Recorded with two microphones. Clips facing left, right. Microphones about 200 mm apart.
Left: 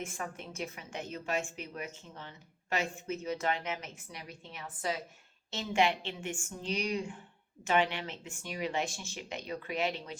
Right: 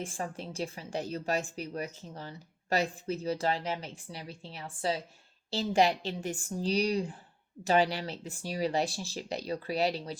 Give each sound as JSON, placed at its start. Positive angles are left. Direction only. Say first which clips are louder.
{"t": 0.0, "sound": "a woman's voice", "louder": "right 3 dB", "side_deg": -30}